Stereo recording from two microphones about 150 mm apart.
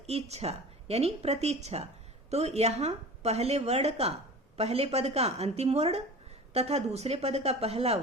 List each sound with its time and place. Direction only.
0.0 s speech: 45° right (ahead or behind)